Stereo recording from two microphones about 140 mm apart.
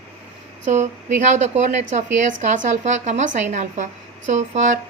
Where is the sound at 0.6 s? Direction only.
55° right (ahead or behind).